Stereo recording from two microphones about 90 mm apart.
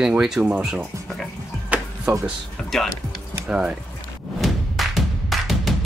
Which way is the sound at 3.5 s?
10° right (ahead or behind).